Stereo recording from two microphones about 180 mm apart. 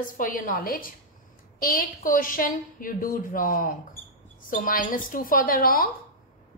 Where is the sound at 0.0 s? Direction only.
50° left (ahead or behind).